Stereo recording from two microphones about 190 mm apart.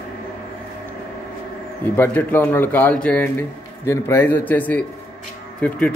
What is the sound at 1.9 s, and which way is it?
A man's voice, 10° left (ahead or behind).